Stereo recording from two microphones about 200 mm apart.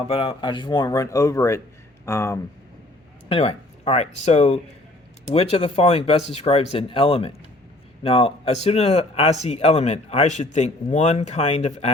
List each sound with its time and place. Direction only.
0.1 s speech: 25° left (ahead or behind)
3.2 s speech: 30° left (ahead or behind)